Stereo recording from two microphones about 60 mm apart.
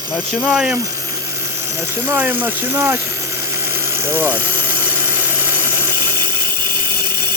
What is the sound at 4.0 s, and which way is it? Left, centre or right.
Speech, right.